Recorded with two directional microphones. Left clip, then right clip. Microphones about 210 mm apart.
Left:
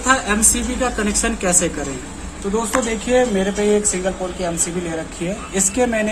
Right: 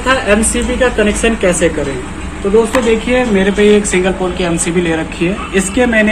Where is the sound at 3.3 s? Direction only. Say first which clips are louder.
Right 8 dB; 20° left (ahead or behind).